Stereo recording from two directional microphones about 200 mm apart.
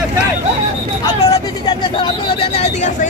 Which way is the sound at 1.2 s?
20° left (ahead or behind).